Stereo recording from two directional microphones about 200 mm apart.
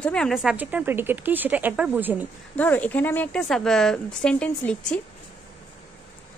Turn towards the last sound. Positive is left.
turn(degrees=5)  # may be behind; listen again after turning